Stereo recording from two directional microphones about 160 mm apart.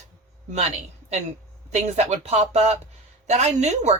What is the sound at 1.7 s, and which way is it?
A woman's voice, 40° right (ahead or behind).